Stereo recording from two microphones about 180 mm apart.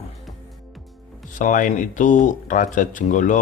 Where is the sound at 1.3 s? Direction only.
45° left (ahead or behind).